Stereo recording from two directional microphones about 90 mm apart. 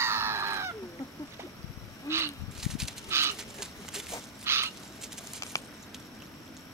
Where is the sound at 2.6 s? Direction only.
5° right (ahead or behind).